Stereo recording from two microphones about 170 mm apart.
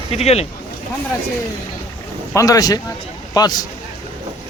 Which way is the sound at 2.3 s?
20° left (ahead or behind).